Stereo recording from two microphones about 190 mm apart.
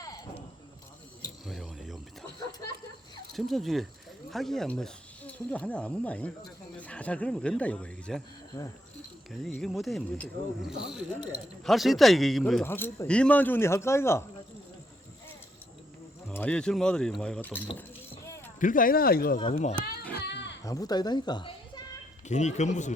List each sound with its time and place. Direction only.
1.5 s a sound: centre (ahead or behind)
3.3 s speech: centre (ahead or behind)
9.3 s speech: centre (ahead or behind)
12.6 s speech: 10° left (ahead or behind)
16.3 s speech: 5° left (ahead or behind)
17.7 s a sound: 10° left (ahead or behind)
18.6 s speech: 45° left (ahead or behind)
19.5 s speech: 35° left (ahead or behind)
20.1 s a sound: 60° left (ahead or behind)
20.7 s speech: 20° left (ahead or behind)
22.3 s speech: 40° left (ahead or behind)